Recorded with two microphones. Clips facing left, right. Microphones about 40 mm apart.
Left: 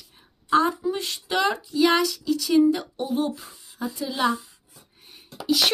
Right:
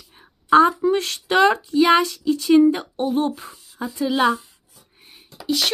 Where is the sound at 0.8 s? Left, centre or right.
Right.